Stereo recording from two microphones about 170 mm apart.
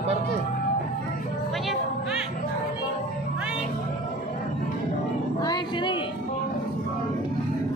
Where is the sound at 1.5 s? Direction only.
Centre (ahead or behind).